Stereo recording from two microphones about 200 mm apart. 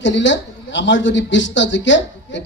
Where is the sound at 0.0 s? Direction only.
65° left (ahead or behind).